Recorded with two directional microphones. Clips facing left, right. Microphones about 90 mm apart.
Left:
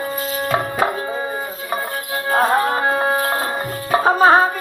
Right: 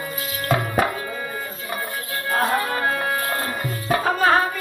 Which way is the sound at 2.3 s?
30° left (ahead or behind).